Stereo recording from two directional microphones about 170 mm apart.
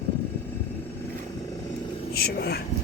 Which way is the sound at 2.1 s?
65° left (ahead or behind).